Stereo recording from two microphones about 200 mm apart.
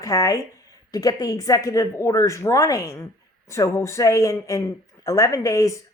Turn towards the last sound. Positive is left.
turn(degrees=15)  # may be behind; listen again after turning